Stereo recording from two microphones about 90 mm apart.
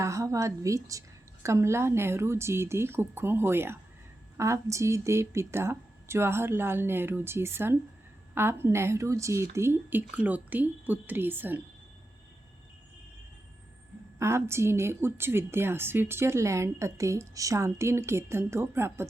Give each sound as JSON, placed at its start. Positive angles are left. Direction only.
{"t": 0.0, "sound": "a woman's voice", "side_deg": -35}
{"t": 10.2, "sound": "a woman's voice", "side_deg": -15}
{"t": 14.2, "sound": "a woman's voice", "side_deg": -30}